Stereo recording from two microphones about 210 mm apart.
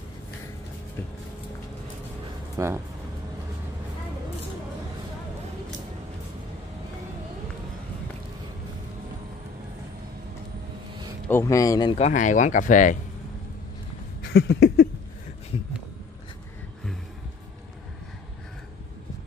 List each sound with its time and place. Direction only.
2.5 s speech: 15° right (ahead or behind)
11.2 s speech: 15° left (ahead or behind)
12.1 s speech: 35° left (ahead or behind)
14.3 s a sound: 55° left (ahead or behind)